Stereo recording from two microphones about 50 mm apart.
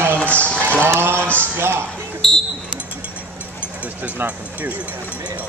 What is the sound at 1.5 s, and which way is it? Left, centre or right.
Speech, right.